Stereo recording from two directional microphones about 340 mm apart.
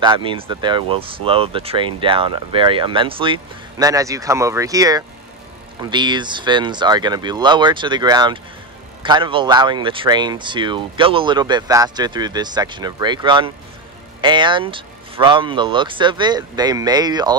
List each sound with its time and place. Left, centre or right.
0.0 s speech: centre